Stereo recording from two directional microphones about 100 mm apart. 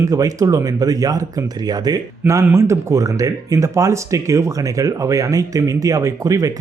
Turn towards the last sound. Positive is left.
turn(degrees=-35)  # may be behind; listen again after turning